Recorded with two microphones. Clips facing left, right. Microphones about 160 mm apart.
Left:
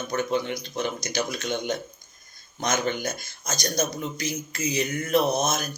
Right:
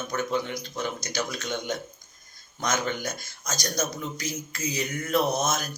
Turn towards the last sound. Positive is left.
turn(degrees=20)  # may be behind; listen again after turning